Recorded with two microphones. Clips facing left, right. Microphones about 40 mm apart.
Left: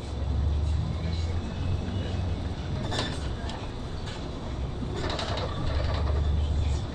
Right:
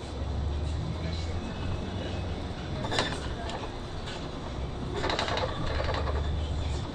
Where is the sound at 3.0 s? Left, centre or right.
Right.